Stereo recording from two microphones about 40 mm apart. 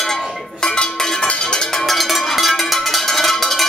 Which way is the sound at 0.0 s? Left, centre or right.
Centre.